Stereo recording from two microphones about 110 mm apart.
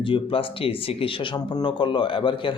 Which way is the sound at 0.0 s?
55° left (ahead or behind).